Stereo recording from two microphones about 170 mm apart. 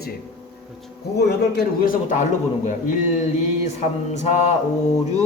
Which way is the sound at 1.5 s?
60° left (ahead or behind).